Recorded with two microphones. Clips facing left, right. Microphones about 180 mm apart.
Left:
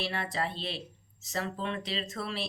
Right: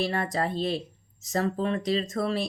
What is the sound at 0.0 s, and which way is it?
Speech, 45° right (ahead or behind).